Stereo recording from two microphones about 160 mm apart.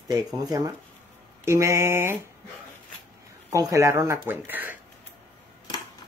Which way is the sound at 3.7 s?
20° right (ahead or behind).